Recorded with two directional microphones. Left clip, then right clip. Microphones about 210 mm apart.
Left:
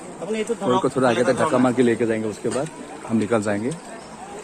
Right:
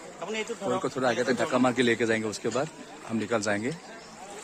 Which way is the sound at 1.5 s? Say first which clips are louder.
Left 6 dB; 15° right (ahead or behind).